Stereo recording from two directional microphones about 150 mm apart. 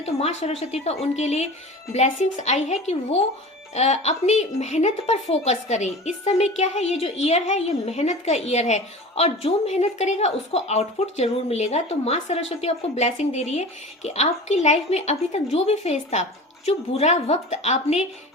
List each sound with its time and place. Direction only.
0.0 s a woman's voice: 45° left (ahead or behind)